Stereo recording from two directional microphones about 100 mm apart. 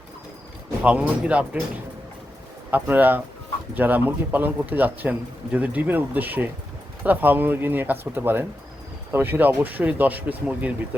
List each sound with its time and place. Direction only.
0.8 s a man's voice: 10° right (ahead or behind)
2.6 s a man's voice: 20° right (ahead or behind)